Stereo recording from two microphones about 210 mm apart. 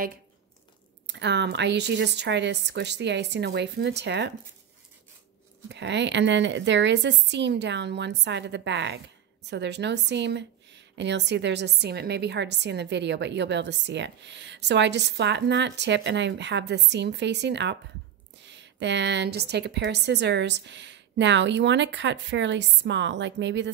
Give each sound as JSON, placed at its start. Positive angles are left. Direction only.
{"t": 1.0, "sound": "a woman's voice", "side_deg": -55}
{"t": 5.7, "sound": "a woman's voice", "side_deg": -55}